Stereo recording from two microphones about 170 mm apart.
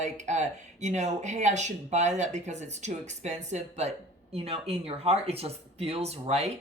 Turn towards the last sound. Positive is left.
turn(degrees=-40)  # may be behind; listen again after turning